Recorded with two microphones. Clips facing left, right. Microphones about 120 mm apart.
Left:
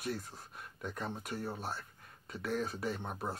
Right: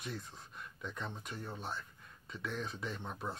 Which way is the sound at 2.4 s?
55° left (ahead or behind).